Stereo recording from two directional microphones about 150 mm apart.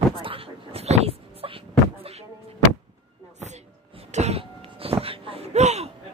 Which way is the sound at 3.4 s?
50° right (ahead or behind).